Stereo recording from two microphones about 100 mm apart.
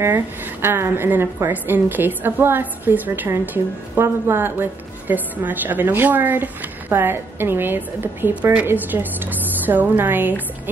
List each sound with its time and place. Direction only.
0.0 s a woman's voice: 20° right (ahead or behind)